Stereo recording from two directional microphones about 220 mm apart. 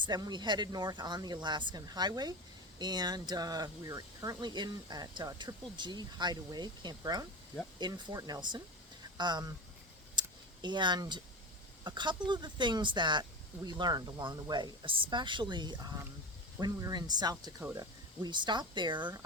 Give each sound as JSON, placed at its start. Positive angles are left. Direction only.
{"t": 0.0, "sound": "speech", "side_deg": -20}
{"t": 10.2, "sound": "a sound", "side_deg": -20}
{"t": 11.8, "sound": "speech", "side_deg": -20}